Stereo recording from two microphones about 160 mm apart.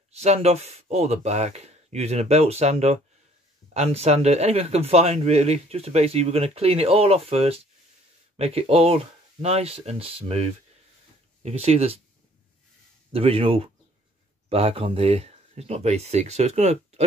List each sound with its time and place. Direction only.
0.1 s speech: 40° right (ahead or behind)
13.1 s speech: 35° right (ahead or behind)